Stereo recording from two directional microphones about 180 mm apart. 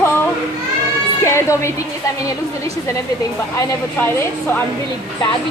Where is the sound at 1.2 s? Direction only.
15° left (ahead or behind).